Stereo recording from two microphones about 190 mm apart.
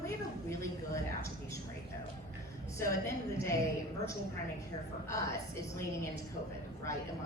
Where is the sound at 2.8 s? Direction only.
15° left (ahead or behind).